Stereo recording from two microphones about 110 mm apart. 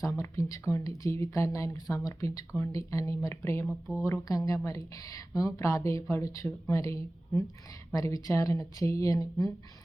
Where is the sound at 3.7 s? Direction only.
5° right (ahead or behind).